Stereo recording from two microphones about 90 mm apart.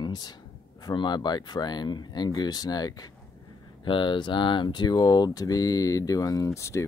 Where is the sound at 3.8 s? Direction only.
65° left (ahead or behind).